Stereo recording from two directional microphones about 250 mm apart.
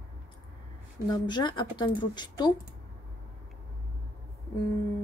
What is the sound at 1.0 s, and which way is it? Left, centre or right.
Speech, centre.